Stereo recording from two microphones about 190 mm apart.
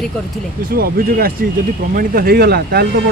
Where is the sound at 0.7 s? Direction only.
50° right (ahead or behind).